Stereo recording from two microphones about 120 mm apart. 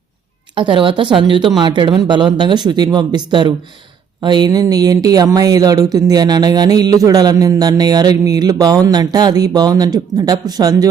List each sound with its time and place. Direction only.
0.5 s a woman's voice: 45° right (ahead or behind)